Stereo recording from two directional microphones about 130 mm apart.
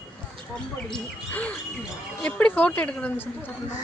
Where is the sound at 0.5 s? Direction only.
10° left (ahead or behind).